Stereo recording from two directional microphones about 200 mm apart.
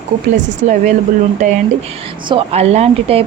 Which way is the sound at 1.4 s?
40° right (ahead or behind).